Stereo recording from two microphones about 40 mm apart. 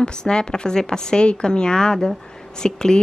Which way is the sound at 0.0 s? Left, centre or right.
Left.